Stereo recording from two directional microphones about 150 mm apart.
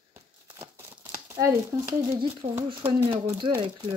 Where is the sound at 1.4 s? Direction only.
20° right (ahead or behind).